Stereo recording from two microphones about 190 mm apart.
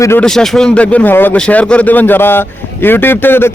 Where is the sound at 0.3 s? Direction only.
Centre (ahead or behind).